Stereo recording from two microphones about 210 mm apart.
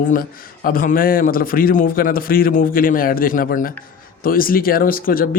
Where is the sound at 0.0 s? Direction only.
40° left (ahead or behind).